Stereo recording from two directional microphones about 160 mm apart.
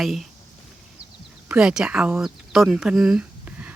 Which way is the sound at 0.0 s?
Centre (ahead or behind).